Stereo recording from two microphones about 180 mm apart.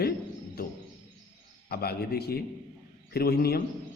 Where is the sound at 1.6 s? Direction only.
60° left (ahead or behind).